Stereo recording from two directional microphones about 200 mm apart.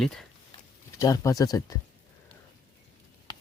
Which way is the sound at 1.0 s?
15° left (ahead or behind).